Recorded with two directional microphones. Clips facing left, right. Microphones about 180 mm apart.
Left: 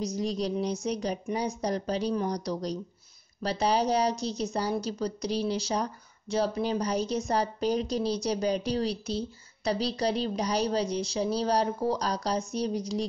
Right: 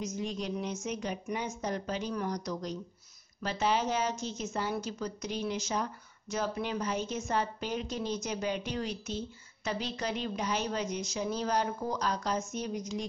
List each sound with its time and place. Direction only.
0.0 s a woman's voice: 35° left (ahead or behind)